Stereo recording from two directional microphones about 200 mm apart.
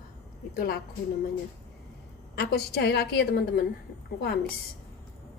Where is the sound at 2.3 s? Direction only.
55° left (ahead or behind).